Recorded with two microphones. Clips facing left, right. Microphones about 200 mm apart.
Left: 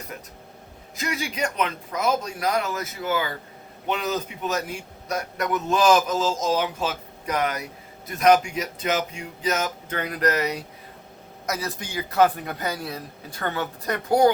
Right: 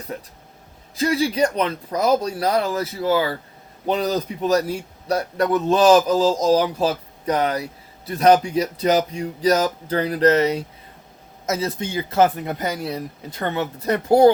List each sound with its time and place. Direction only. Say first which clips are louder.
0.9 s a man's voice: right 9 dB; 30° right (ahead or behind)